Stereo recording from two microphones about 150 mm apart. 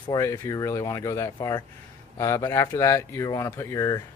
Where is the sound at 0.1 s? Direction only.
20° left (ahead or behind).